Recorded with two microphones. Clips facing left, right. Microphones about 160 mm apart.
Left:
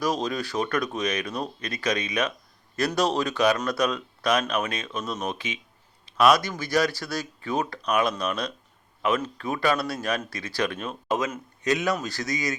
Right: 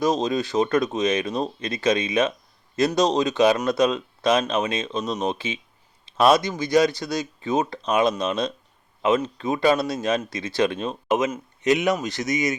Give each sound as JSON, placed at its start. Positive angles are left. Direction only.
{"t": 0.0, "sound": "speech", "side_deg": -25}